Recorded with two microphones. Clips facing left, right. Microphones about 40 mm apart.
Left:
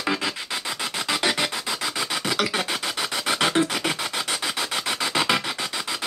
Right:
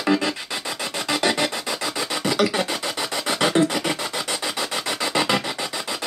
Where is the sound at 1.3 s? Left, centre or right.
Centre.